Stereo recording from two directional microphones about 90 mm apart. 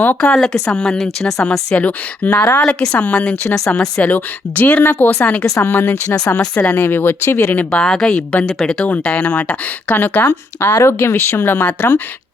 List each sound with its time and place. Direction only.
0.0 s speech: 15° left (ahead or behind)